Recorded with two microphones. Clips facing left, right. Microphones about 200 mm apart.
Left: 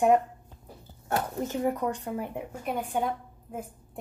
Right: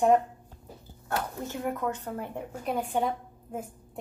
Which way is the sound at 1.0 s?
20° left (ahead or behind).